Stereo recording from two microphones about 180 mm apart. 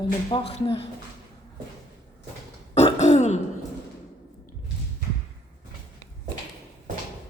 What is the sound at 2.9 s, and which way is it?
Throat clearing, 40° left (ahead or behind).